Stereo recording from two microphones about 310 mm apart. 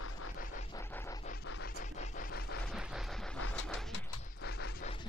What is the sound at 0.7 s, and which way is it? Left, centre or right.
Scratch, centre.